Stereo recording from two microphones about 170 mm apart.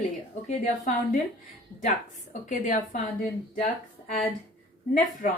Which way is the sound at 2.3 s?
45° left (ahead or behind).